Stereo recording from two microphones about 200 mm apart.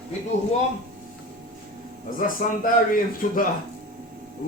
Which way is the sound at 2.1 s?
45° left (ahead or behind).